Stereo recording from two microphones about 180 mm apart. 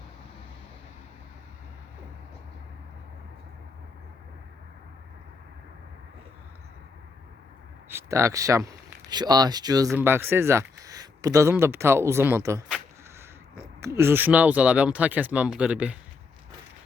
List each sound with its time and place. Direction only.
7.9 s speech: 15° right (ahead or behind)
13.8 s speech: 15° right (ahead or behind)